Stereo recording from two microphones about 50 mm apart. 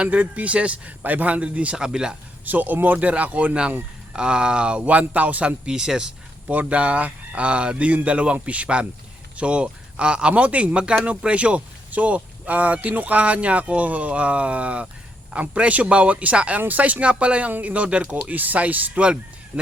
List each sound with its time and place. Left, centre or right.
0.0 s speech: right
1.7 s speech: centre
2.4 s speech: right
3.1 s speech: right
4.8 s speech: right
5.6 s speech: centre
6.5 s speech: right